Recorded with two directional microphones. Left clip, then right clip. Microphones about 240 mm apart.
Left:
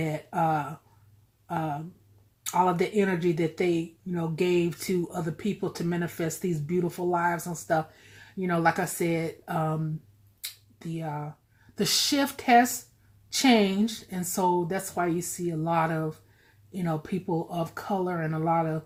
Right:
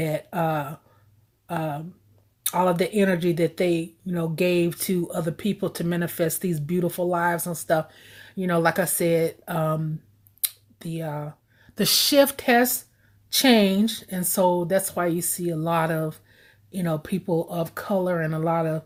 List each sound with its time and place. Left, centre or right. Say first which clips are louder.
0.0 s speech: right 2 dB; right